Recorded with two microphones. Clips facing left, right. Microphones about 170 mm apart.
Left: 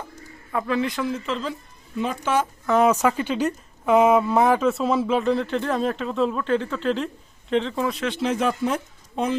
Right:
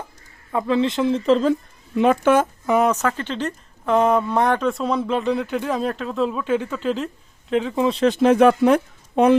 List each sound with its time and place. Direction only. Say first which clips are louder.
0.5 s speech: right 4 dB; 25° right (ahead or behind); by 1.5 s 40° right (ahead or behind)
2.0 s speech: right 7 dB; 60° right (ahead or behind)
2.8 s speech: left 1 dB; 10° left (ahead or behind)
7.8 s speech: right 5 dB; 25° right (ahead or behind)
8.0 s speech: right 12 dB; 50° right (ahead or behind); by 9.3 s 65° right (ahead or behind)